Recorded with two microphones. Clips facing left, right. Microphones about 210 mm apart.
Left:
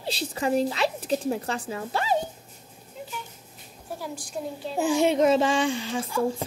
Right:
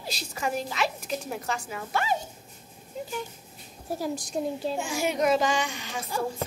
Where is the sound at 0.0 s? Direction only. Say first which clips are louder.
Left 4 dB; 30° left (ahead or behind).